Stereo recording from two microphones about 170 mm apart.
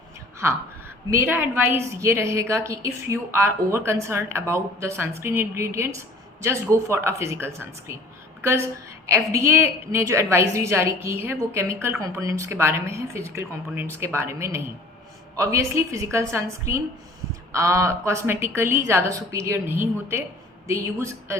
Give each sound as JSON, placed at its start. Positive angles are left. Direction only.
{"t": 1.1, "sound": "a woman's voice", "side_deg": -15}